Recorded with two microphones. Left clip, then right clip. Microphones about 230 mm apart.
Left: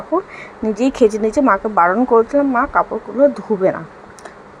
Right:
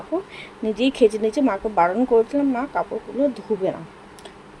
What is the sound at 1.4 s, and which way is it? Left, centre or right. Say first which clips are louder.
Speech: left 7 dB; centre.